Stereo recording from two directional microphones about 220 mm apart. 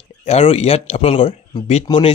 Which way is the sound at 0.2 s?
30° left (ahead or behind).